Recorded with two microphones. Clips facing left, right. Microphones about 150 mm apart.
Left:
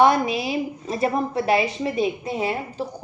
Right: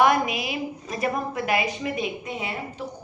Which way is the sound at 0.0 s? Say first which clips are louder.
Left 3 dB; 30° left (ahead or behind).